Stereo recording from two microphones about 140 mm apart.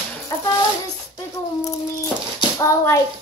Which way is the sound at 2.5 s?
25° left (ahead or behind).